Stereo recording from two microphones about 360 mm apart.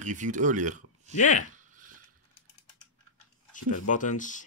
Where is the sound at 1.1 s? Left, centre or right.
Centre.